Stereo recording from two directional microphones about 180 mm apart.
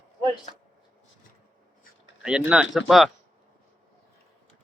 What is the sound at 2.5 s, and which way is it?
Speech, 5° right (ahead or behind).